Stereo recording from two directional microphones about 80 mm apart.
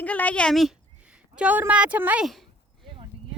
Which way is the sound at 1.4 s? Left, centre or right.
Right.